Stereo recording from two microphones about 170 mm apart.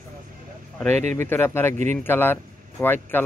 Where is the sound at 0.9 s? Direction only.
45° right (ahead or behind).